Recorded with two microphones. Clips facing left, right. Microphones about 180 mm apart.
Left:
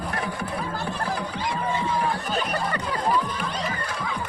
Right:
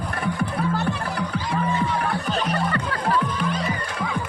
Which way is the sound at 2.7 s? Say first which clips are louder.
Right 1 dB; 15° left (ahead or behind).